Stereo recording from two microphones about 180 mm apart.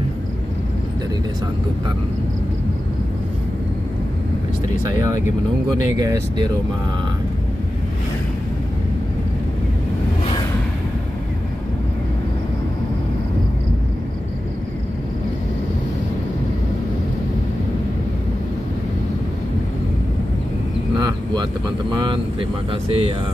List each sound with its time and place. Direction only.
4.8 s speech: 20° right (ahead or behind)
20.9 s vehicle: 25° right (ahead or behind)
21.9 s speech: 25° right (ahead or behind)